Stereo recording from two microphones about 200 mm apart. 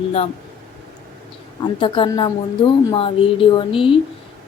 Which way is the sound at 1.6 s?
25° left (ahead or behind).